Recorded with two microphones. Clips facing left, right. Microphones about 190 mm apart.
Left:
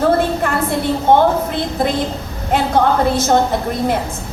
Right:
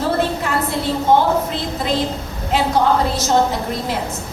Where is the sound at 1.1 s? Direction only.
55° left (ahead or behind).